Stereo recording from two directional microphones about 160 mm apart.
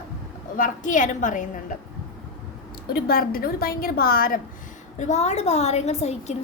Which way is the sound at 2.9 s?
70° left (ahead or behind).